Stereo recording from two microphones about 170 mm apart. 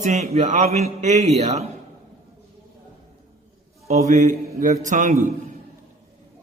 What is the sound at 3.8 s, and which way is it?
A man's voice, 40° right (ahead or behind).